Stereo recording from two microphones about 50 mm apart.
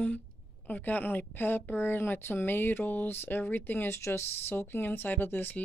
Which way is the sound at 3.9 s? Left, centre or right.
Left.